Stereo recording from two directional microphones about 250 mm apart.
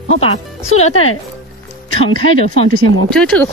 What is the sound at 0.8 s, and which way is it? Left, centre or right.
Speech, left.